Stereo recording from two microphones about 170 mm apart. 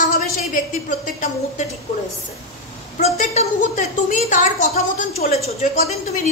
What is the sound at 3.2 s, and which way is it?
A woman's voice, 45° left (ahead or behind).